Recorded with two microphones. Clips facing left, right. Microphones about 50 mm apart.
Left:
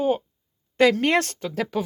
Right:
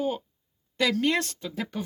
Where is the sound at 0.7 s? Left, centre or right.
Left.